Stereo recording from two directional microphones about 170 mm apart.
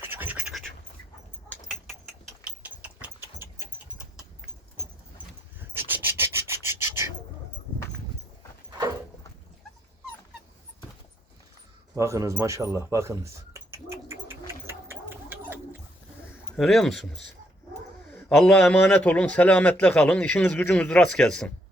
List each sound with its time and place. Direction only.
0.1 s quack: 10° right (ahead or behind)
1.5 s a sound: centre (ahead or behind)
2.6 s engine: 10° right (ahead or behind)
5.7 s rub: 15° right (ahead or behind)
11.9 s a sound: 20° right (ahead or behind)
16.6 s speech: centre (ahead or behind)
18.1 s speech: 5° left (ahead or behind)